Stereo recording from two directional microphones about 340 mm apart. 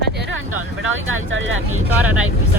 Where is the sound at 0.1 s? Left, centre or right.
Right.